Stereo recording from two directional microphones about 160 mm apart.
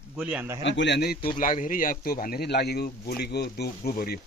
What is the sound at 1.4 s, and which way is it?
Speech, 55° left (ahead or behind).